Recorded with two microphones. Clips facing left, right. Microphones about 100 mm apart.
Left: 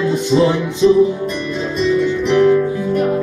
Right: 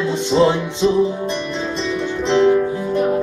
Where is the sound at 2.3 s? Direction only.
25° right (ahead or behind).